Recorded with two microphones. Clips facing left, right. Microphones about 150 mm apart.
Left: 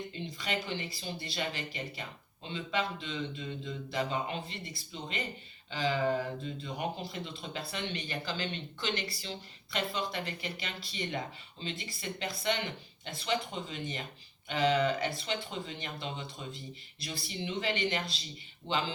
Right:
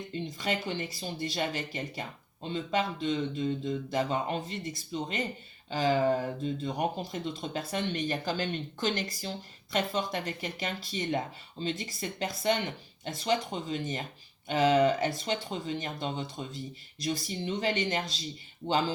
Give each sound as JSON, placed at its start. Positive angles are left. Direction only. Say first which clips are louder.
{"t": 0.3, "sound": "speech", "louder": "right 3 dB", "side_deg": -45}